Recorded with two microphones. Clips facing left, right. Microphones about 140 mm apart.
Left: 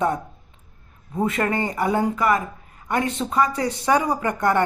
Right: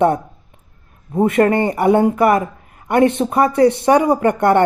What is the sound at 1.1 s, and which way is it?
Speech, 55° right (ahead or behind).